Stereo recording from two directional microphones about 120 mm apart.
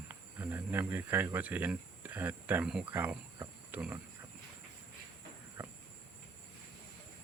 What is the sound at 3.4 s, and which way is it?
Cricket, 20° right (ahead or behind).